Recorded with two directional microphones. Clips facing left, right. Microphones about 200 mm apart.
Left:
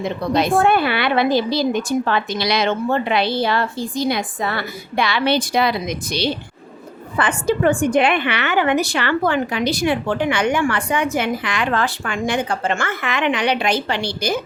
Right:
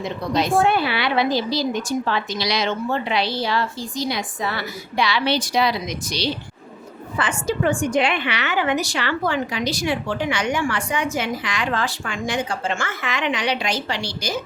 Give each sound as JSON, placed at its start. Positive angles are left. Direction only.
{"t": 0.0, "sound": "a woman's voice", "side_deg": 55}